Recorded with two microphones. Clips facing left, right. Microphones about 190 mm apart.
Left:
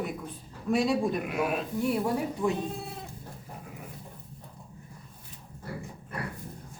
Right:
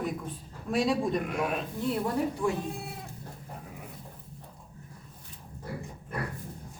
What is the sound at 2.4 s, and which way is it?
Speech, 20° left (ahead or behind).